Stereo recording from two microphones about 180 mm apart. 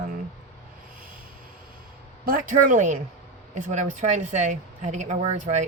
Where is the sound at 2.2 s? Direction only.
50° right (ahead or behind).